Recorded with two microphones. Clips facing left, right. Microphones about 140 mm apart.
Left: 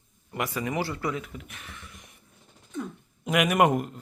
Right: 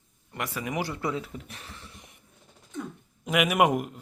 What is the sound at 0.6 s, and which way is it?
Speech, 15° right (ahead or behind).